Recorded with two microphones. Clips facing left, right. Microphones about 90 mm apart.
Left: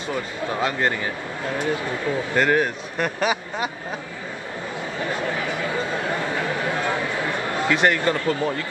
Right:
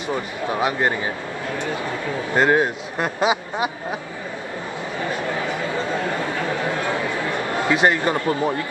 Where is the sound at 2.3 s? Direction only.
20° right (ahead or behind).